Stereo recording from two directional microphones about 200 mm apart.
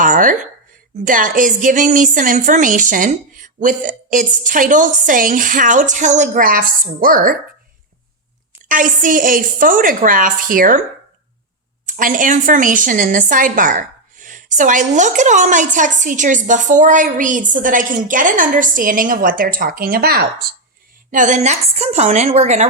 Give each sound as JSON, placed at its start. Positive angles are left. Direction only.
{"t": 0.0, "sound": "a sound", "side_deg": -40}
{"t": 1.0, "sound": "a woman's voice", "side_deg": -40}
{"t": 8.6, "sound": "a woman's voice", "side_deg": -40}
{"t": 11.9, "sound": "a woman's voice", "side_deg": -40}
{"t": 21.1, "sound": "a woman's voice", "side_deg": -40}